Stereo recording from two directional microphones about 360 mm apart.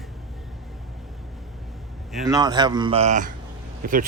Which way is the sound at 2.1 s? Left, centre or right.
Centre.